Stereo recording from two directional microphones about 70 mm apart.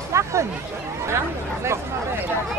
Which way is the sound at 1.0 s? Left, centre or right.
Right.